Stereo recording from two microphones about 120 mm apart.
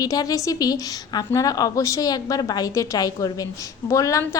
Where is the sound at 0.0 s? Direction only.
30° left (ahead or behind).